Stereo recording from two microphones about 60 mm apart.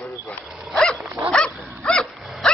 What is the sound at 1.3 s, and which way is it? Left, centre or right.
Dog, centre.